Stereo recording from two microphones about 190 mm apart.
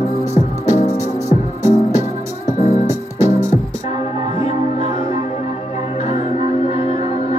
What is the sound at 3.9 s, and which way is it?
Music, 35° left (ahead or behind).